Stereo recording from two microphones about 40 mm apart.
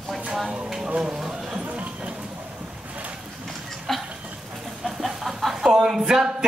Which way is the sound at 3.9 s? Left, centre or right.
Centre.